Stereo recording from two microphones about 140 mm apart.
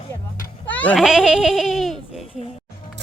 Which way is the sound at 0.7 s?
10° left (ahead or behind).